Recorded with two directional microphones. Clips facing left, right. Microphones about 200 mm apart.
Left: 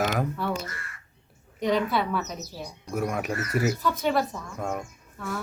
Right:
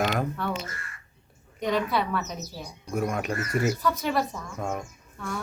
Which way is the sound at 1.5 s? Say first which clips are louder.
Left 1 dB; centre (ahead or behind).